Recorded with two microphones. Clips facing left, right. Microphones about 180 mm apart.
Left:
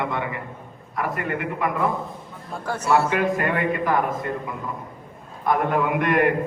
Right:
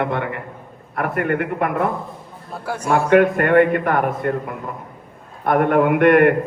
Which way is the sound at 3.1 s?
60° right (ahead or behind).